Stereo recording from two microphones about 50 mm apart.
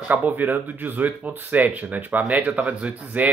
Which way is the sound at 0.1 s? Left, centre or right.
Right.